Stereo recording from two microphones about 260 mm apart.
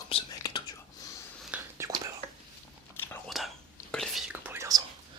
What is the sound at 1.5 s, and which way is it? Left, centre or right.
Whispering, centre.